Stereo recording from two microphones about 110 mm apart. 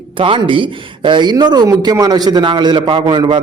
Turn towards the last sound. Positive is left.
turn(degrees=-45)  # may be behind; listen again after turning